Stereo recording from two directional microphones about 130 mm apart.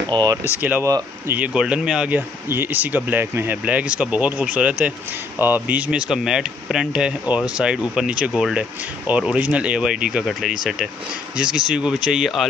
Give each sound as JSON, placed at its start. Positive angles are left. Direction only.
{"t": 0.0, "sound": "speech", "side_deg": -30}
{"t": 0.6, "sound": "speech", "side_deg": -15}
{"t": 0.8, "sound": "speech", "side_deg": -25}
{"t": 1.4, "sound": "speech", "side_deg": -5}